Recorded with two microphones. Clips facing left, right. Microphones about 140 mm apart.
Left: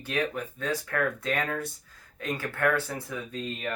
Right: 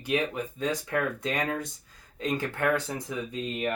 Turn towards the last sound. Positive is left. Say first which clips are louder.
# right 3 dB
turn(degrees=-15)  # may be behind; listen again after turning